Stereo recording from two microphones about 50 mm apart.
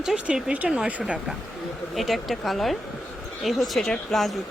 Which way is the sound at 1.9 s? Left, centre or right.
Centre.